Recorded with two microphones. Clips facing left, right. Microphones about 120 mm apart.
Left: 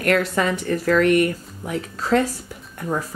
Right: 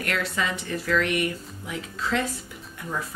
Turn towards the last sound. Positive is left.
turn(degrees=45)  # may be behind; listen again after turning